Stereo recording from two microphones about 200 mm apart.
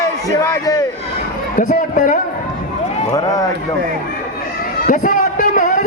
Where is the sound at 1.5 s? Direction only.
40° left (ahead or behind).